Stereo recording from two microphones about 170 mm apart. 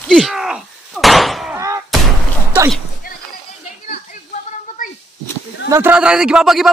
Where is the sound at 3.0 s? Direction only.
55° left (ahead or behind).